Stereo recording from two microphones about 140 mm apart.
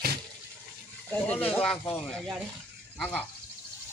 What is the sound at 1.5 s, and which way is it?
Speech, 5° left (ahead or behind).